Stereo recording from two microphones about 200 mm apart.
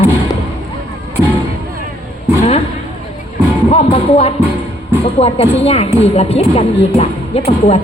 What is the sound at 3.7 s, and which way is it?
Music, 30° left (ahead or behind).